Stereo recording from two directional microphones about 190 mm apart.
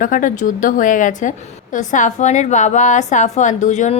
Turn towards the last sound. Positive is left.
turn(degrees=40)  # may be behind; listen again after turning